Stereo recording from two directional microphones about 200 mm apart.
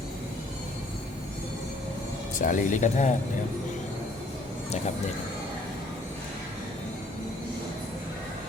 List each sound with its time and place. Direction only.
2.4 s speech: 40° left (ahead or behind)